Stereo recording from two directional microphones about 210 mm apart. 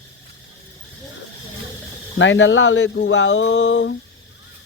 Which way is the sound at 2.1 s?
60° left (ahead or behind).